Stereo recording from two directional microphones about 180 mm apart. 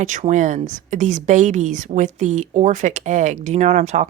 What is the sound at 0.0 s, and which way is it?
Speech, 45° right (ahead or behind).